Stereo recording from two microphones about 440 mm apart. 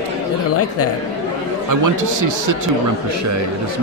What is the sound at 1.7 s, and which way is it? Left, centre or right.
Speech, right.